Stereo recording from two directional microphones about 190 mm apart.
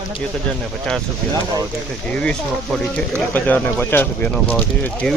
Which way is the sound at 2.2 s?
5° left (ahead or behind).